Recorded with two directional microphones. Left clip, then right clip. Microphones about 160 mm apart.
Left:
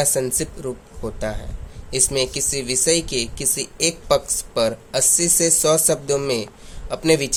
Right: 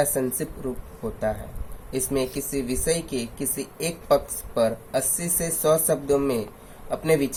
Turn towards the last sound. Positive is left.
turn(degrees=40)  # may be behind; listen again after turning